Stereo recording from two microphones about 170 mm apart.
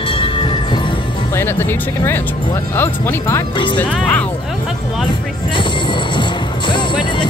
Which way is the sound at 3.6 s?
30° left (ahead or behind).